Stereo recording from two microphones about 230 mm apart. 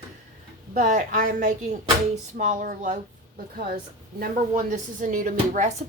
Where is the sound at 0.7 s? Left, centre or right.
Right.